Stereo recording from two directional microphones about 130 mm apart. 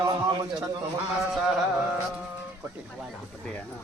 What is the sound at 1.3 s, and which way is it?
Music, centre (ahead or behind).